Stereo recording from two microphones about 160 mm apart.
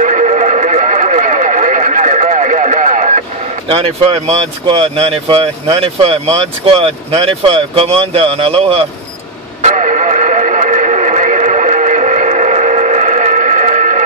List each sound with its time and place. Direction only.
0.0 s neigh: 50° right (ahead or behind)
9.6 s radio: 50° right (ahead or behind)